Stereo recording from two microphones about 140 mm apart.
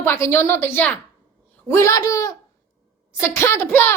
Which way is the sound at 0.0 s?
15° left (ahead or behind).